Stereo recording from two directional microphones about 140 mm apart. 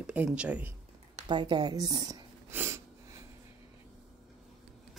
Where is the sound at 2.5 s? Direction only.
20° right (ahead or behind).